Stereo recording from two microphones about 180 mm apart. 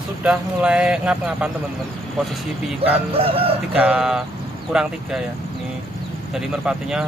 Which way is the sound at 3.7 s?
5° right (ahead or behind).